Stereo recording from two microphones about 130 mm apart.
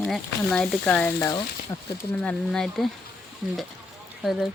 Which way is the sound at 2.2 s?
5° left (ahead or behind).